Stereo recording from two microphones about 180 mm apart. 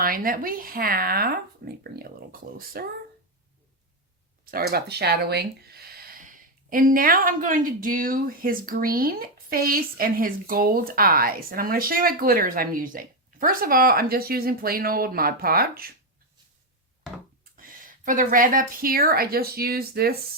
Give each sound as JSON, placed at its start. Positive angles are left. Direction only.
{"t": 0.0, "sound": "speech", "side_deg": -55}
{"t": 4.5, "sound": "speech", "side_deg": -60}
{"t": 17.6, "sound": "speech", "side_deg": -50}